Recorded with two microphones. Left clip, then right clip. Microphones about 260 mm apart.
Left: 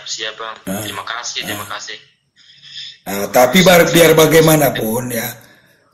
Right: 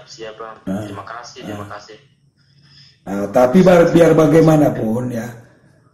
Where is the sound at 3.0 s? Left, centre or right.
Left.